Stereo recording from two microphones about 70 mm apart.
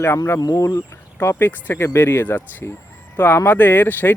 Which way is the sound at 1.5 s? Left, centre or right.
Left.